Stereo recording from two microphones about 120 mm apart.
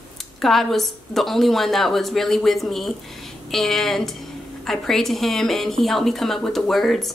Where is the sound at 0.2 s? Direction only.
Centre (ahead or behind).